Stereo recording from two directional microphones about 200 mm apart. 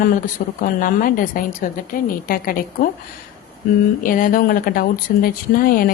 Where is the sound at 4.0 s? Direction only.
45° left (ahead or behind).